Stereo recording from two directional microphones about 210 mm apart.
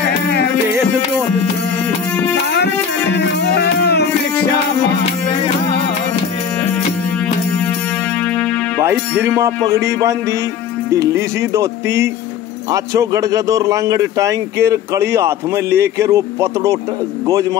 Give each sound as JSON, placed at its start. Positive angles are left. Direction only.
{"t": 2.5, "sound": "music", "side_deg": 50}
{"t": 8.7, "sound": "music", "side_deg": -10}
{"t": 9.8, "sound": "a man's voice", "side_deg": -15}